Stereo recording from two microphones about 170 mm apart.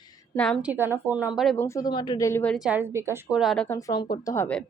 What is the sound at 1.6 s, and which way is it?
Speech, 20° left (ahead or behind).